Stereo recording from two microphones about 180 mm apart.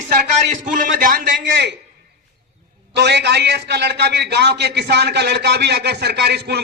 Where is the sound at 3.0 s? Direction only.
70° right (ahead or behind).